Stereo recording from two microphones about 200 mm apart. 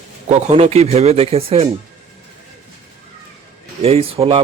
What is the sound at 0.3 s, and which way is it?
Speech, 35° right (ahead or behind).